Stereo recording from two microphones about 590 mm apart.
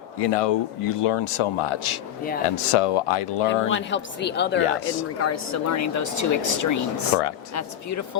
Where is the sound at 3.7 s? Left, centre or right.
Centre.